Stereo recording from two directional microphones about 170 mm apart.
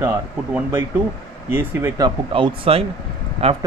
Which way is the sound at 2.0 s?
30° right (ahead or behind).